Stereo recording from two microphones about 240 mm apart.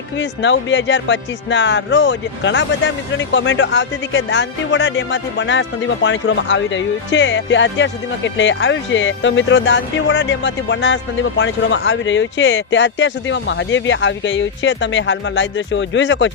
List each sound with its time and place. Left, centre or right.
0.2 s speech: left